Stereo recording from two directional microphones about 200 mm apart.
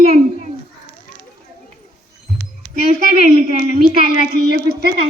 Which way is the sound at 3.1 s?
30° right (ahead or behind).